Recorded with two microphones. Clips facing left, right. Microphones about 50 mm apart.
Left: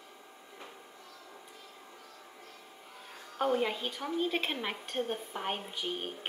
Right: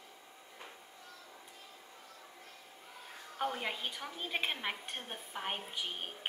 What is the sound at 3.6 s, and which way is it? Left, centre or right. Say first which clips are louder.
Speech: left 6 dB; centre.